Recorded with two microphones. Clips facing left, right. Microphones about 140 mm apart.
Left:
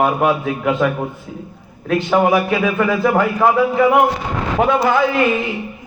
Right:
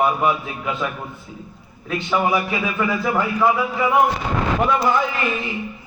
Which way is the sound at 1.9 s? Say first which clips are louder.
Left 6 dB; 50° left (ahead or behind).